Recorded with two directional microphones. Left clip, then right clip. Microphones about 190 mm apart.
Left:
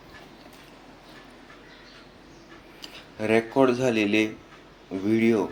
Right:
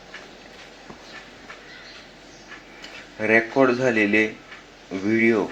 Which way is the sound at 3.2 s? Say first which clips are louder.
Right 3 dB; 20° left (ahead or behind).